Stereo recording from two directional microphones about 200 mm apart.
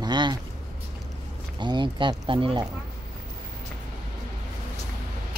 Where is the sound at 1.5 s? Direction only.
20° right (ahead or behind).